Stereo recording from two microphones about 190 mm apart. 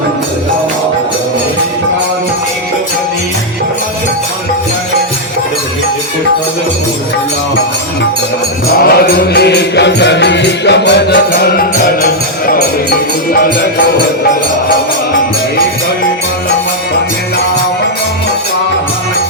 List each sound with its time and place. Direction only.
8.8 s music: 55° left (ahead or behind)